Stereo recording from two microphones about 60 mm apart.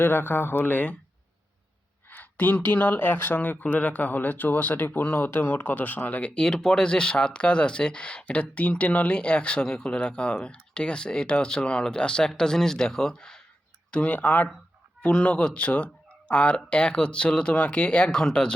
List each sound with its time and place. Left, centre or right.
0.0 s speech: left
2.0 s speech: left; by 18.5 s centre